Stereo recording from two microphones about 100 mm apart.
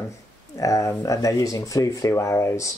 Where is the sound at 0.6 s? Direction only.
30° left (ahead or behind).